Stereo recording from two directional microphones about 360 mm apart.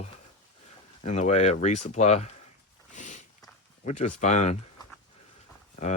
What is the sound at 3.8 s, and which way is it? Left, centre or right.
Speech, centre.